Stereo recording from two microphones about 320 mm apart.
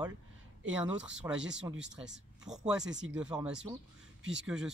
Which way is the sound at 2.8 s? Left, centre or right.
Right.